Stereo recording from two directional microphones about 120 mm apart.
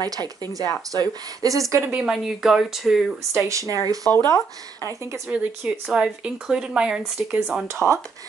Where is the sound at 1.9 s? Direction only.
5° right (ahead or behind).